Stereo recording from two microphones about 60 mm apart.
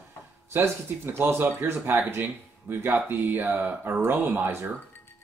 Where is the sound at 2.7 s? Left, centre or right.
Right.